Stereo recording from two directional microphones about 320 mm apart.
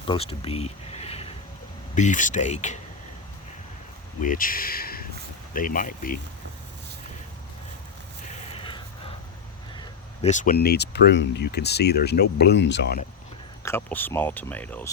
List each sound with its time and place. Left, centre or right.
0.1 s speech: centre
4.2 s speech: left
8.3 s a sound: centre
9.7 s speech: centre
13.6 s speech: centre